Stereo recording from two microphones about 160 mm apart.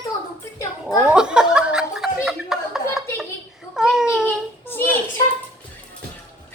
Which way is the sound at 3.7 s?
5° right (ahead or behind).